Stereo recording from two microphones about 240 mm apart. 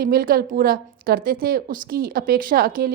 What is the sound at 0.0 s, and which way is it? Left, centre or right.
A woman's voice, right.